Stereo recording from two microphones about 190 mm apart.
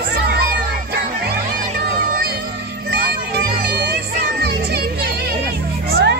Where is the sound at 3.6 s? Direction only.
60° right (ahead or behind).